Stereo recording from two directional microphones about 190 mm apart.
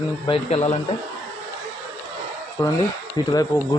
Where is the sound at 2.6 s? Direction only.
20° left (ahead or behind).